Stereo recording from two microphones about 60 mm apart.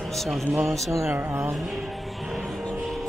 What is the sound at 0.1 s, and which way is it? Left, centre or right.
Speech, centre.